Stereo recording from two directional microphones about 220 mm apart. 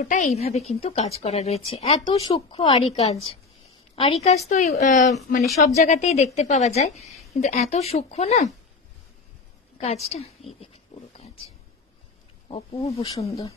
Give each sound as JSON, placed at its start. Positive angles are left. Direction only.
{"t": 0.0, "sound": "speech", "side_deg": 35}
{"t": 2.0, "sound": "a woman's voice", "side_deg": 15}
{"t": 5.4, "sound": "a woman's voice", "side_deg": 0}
{"t": 5.7, "sound": "a woman's voice", "side_deg": 30}
{"t": 7.0, "sound": "a sound", "side_deg": 0}
{"t": 7.3, "sound": "speech", "side_deg": 30}
{"t": 10.0, "sound": "speech", "side_deg": 30}
{"t": 11.1, "sound": "a sound", "side_deg": 30}
{"t": 12.4, "sound": "speech", "side_deg": 25}